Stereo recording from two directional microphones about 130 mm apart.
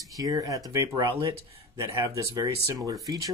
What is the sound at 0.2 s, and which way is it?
Speech, 25° right (ahead or behind).